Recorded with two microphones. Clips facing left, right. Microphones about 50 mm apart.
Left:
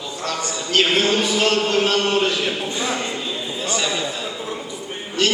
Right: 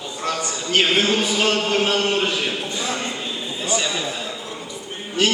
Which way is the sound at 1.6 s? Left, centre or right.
Centre.